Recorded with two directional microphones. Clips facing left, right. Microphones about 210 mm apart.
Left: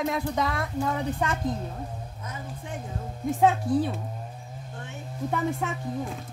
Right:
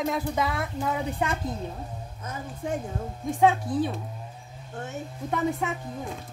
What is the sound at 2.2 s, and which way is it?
Speech, 45° right (ahead or behind).